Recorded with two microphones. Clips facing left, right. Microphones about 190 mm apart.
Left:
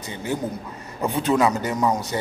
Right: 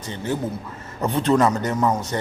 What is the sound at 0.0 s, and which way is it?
A man's voice, 10° left (ahead or behind).